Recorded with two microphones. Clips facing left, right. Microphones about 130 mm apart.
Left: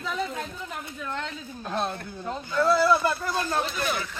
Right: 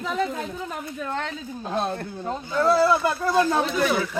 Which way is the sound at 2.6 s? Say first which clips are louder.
Right 2 dB; 30° right (ahead or behind).